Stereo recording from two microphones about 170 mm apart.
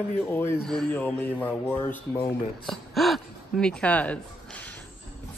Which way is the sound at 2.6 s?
Centre (ahead or behind).